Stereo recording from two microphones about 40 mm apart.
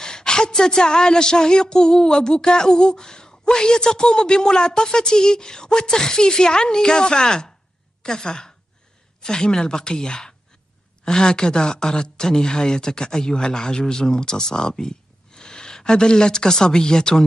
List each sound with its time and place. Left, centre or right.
0.0 s a woman's voice: centre